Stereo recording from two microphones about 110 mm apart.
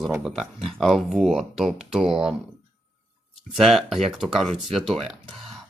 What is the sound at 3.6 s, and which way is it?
Speech, centre (ahead or behind).